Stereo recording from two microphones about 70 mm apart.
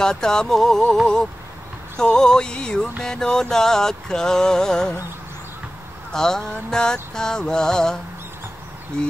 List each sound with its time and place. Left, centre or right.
0.0 s music: centre
2.0 s music: centre
6.1 s music: centre